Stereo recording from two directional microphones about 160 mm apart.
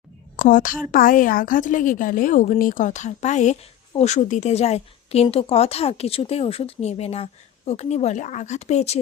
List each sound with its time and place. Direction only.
0.3 s a woman's voice: 55° left (ahead or behind); by 9.0 s 40° left (ahead or behind)